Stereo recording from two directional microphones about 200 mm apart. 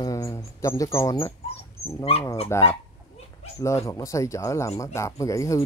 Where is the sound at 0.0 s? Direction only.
15° left (ahead or behind).